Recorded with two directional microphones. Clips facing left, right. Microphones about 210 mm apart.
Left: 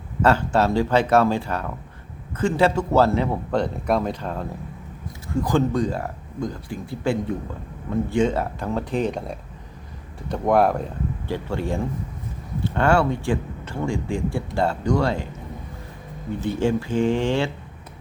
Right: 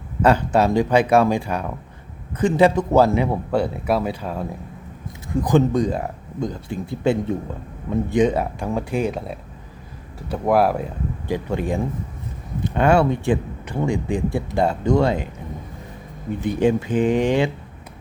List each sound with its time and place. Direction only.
0.2 s speech: 15° right (ahead or behind)
5.3 s speech: 20° right (ahead or behind)
11.3 s speech: 15° right (ahead or behind)
16.4 s speech: 15° right (ahead or behind)